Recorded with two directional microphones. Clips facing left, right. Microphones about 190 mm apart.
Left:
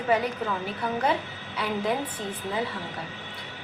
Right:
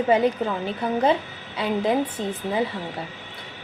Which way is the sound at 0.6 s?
25° right (ahead or behind).